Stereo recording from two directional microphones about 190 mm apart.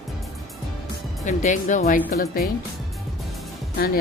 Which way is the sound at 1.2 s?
40° left (ahead or behind).